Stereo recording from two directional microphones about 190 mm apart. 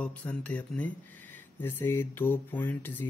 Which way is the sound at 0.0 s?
5° left (ahead or behind).